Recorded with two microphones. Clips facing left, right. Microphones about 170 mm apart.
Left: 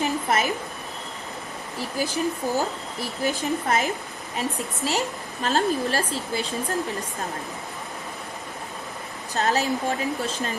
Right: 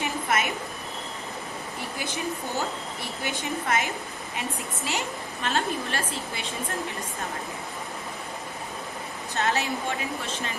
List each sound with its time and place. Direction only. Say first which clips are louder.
0.0 s a sound: left 3 dB; 35° left (ahead or behind)
2.0 s a woman's voice: left 7 dB; 35° left (ahead or behind)
4.9 s a woman's voice: left 4 dB; 35° left (ahead or behind)
9.3 s a woman's voice: left 4 dB; 35° left (ahead or behind)